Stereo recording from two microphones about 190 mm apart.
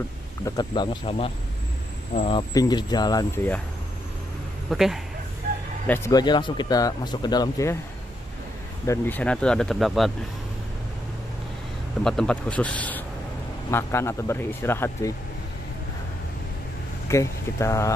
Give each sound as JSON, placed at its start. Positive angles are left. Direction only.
{"t": 0.4, "sound": "speech", "side_deg": 20}
{"t": 2.5, "sound": "speech", "side_deg": 20}
{"t": 4.6, "sound": "speech", "side_deg": 0}
{"t": 5.9, "sound": "speech", "side_deg": 15}
{"t": 8.8, "sound": "speech", "side_deg": 15}
{"t": 12.0, "sound": "speech", "side_deg": 5}
{"t": 17.1, "sound": "speech", "side_deg": 15}